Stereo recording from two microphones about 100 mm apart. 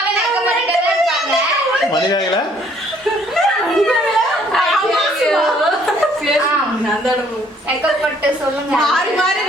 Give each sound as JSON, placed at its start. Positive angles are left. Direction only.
{"t": 1.9, "sound": "speech", "side_deg": 45}
{"t": 3.3, "sound": "a sound", "side_deg": 0}
{"t": 4.5, "sound": "chuckle", "side_deg": 0}
{"t": 8.7, "sound": "a woman's voice", "side_deg": 5}